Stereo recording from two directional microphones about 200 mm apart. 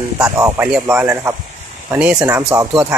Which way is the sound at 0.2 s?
10° right (ahead or behind).